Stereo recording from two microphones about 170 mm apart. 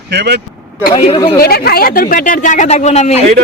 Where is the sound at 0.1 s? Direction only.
80° right.